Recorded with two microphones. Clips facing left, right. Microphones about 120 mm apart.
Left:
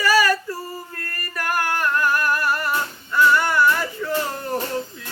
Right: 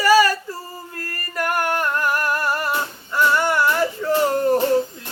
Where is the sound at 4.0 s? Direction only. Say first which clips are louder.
Right 4 dB; 25° right (ahead or behind).